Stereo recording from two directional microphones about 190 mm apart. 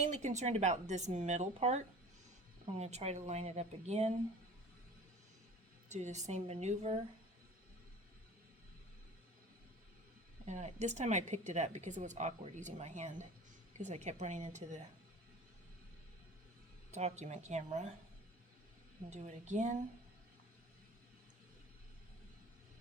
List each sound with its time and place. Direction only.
0.0 s speech: 40° right (ahead or behind)
5.9 s speech: 40° right (ahead or behind)
10.4 s speech: 35° right (ahead or behind)
16.9 s speech: 35° right (ahead or behind)
19.1 s speech: 40° right (ahead or behind)